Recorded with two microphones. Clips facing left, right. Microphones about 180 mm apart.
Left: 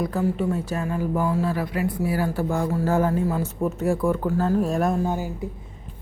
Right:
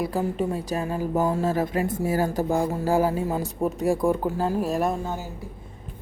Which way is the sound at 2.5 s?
15° right (ahead or behind).